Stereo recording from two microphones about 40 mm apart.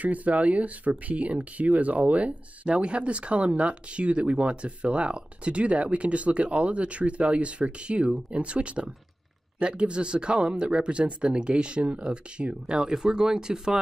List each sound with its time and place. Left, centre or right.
0.0 s speech: right; by 13.7 s centre